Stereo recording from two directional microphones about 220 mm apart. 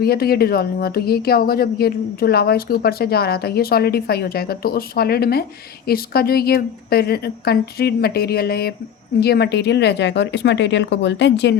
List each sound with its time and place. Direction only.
0.0 s speech: 45° left (ahead or behind)